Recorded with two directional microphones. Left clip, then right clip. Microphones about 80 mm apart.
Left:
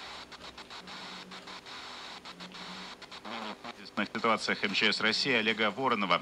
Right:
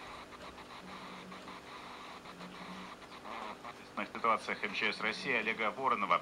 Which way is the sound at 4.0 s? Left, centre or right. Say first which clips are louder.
Left 3 dB; left.